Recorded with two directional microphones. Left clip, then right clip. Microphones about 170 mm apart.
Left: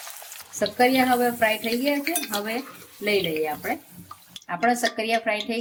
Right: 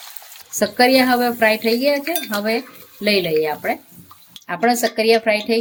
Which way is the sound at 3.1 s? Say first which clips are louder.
Right 6 dB; 65° right (ahead or behind).